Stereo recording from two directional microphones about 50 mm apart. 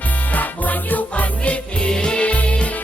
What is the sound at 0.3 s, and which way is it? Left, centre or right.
Music, left.